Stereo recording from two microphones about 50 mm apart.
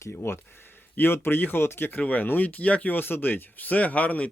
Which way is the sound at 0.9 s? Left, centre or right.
Left.